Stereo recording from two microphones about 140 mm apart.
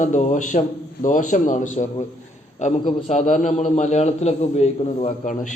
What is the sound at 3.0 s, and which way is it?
A man's voice, 55° left (ahead or behind).